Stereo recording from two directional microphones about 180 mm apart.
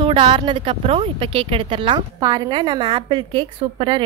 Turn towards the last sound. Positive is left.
turn(degrees=-25)  # may be behind; listen again after turning